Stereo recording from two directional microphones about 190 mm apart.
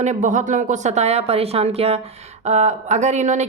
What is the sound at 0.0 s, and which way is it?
A woman's voice, 40° right (ahead or behind).